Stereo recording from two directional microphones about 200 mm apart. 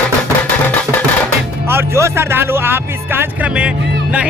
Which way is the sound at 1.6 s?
10° right (ahead or behind).